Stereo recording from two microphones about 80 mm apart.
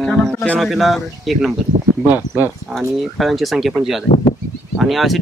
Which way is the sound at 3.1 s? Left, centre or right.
Centre.